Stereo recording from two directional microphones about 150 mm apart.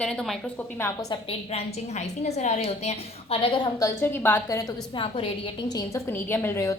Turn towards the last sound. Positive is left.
turn(degrees=20)  # may be behind; listen again after turning